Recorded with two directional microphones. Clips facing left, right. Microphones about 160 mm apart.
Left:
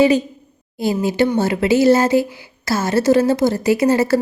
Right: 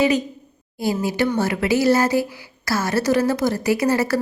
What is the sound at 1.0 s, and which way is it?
A woman's voice, 25° left (ahead or behind).